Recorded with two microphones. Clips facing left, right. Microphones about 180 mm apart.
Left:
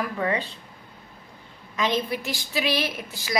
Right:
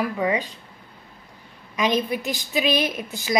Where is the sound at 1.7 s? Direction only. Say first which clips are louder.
Right 3 dB; 15° right (ahead or behind).